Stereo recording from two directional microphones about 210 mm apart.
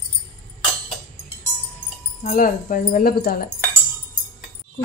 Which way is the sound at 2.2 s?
40° left (ahead or behind).